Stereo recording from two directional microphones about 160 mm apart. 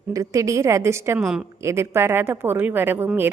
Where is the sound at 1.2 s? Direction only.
5° right (ahead or behind).